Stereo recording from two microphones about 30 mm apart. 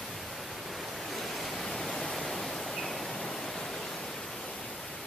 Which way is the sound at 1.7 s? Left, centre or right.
Centre.